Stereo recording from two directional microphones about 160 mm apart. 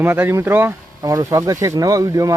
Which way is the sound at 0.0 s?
15° right (ahead or behind).